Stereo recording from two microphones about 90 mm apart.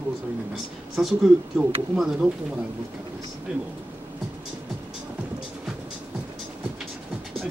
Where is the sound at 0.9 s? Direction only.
Centre (ahead or behind).